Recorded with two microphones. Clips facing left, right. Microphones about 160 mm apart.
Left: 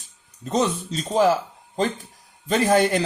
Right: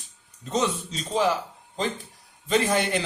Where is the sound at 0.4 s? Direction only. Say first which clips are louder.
Left 3 dB; 40° left (ahead or behind).